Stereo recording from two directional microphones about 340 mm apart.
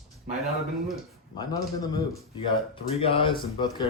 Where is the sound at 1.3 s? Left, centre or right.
Centre.